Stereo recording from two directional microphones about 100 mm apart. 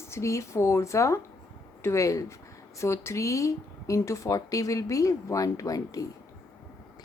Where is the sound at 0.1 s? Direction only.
30° left (ahead or behind).